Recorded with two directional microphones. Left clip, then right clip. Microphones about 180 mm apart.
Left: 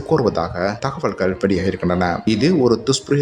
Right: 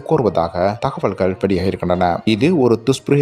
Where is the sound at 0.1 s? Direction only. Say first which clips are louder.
Right 2 dB; 25° right (ahead or behind).